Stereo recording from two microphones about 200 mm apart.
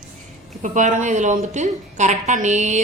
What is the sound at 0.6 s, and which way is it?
A woman's voice, 40° right (ahead or behind).